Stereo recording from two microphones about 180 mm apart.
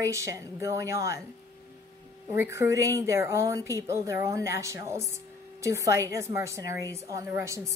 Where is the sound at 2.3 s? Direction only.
15° right (ahead or behind).